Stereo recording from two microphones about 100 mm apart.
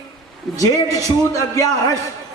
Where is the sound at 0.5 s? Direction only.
35° left (ahead or behind).